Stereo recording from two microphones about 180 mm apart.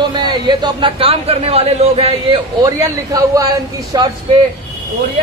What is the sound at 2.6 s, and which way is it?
A man's voice, 20° right (ahead or behind).